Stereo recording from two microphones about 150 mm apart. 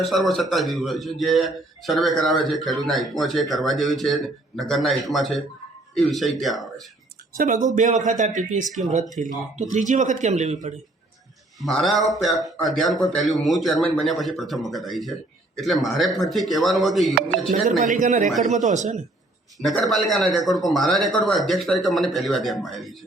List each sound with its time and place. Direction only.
0.0 s a man's voice: centre (ahead or behind)
7.3 s speech: 60° right (ahead or behind)
11.6 s a man's voice: centre (ahead or behind)
17.7 s speech: 55° right (ahead or behind)
19.6 s a man's voice: centre (ahead or behind)